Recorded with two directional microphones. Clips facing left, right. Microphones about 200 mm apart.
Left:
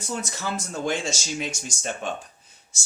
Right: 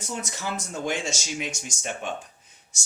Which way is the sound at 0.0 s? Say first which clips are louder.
Left 2 dB; 20° right (ahead or behind).